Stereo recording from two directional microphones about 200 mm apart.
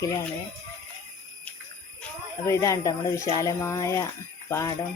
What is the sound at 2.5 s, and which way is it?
Speech, 15° left (ahead or behind).